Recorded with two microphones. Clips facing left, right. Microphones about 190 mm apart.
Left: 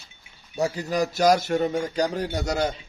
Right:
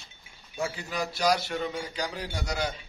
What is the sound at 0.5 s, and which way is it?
A man's voice, 40° left (ahead or behind).